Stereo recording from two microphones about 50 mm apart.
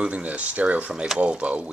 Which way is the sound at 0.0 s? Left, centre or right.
Right.